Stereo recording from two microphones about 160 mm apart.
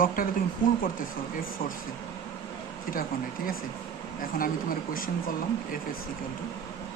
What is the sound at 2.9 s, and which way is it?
Speech, 60° left (ahead or behind).